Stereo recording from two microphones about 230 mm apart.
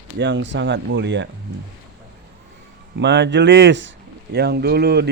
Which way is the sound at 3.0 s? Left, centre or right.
Right.